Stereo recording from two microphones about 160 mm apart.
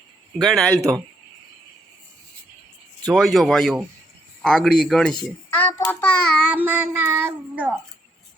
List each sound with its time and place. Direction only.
0.4 s speech: 5° left (ahead or behind)
0.8 s speech: 20° right (ahead or behind)
3.1 s a child's voice: centre (ahead or behind)
5.8 s child singing: 15° left (ahead or behind)
6.5 s child singing: 10° right (ahead or behind)